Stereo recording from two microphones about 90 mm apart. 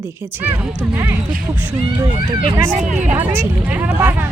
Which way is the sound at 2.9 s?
20° right (ahead or behind).